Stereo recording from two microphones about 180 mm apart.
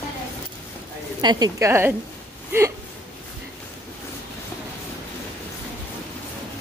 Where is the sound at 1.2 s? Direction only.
25° right (ahead or behind).